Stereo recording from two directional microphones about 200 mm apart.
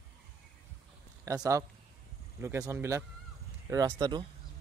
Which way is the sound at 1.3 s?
15° right (ahead or behind).